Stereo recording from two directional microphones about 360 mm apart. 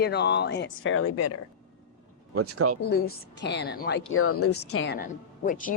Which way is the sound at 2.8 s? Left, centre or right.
Left.